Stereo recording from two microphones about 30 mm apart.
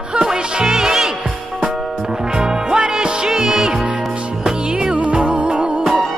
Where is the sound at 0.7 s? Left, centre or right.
Centre.